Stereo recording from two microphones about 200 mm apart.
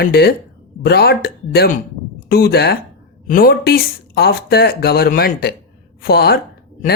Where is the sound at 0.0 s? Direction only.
50° left (ahead or behind).